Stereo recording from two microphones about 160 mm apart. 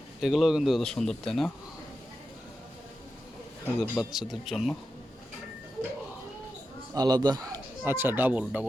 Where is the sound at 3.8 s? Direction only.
Centre (ahead or behind).